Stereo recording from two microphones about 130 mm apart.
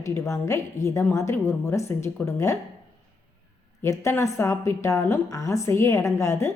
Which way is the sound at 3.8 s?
25° left (ahead or behind).